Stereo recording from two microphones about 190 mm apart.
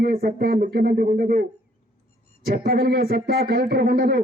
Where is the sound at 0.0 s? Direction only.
55° right (ahead or behind).